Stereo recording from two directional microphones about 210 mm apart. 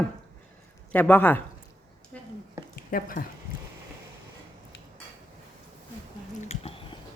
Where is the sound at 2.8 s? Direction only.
40° left (ahead or behind).